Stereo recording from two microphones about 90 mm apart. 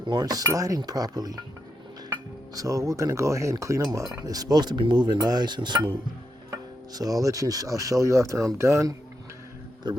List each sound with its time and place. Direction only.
0.0 s speech: 55° right (ahead or behind)
2.6 s speech: 35° right (ahead or behind); by 5.9 s 55° right (ahead or behind)
6.5 s speech: 45° right (ahead or behind)
9.8 s speech: 55° right (ahead or behind)